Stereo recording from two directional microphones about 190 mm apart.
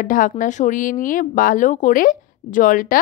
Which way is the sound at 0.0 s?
45° left (ahead or behind).